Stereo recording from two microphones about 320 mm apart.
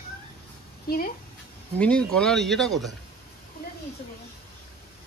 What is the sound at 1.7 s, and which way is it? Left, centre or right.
Speech, centre.